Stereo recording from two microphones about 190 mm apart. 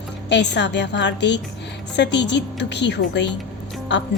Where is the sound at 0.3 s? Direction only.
65° left (ahead or behind).